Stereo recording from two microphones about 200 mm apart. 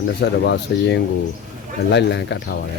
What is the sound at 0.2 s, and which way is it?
Speech, 60° left (ahead or behind).